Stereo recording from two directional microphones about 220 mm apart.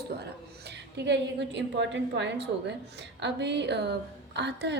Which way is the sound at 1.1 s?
55° right (ahead or behind).